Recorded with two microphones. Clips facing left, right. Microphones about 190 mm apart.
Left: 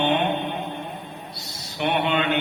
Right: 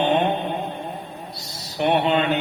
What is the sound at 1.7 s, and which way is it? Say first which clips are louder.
Speech: right 3 dB; 35° right (ahead or behind).